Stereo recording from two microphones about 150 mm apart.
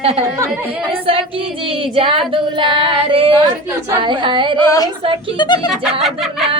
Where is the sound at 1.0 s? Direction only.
35° right (ahead or behind).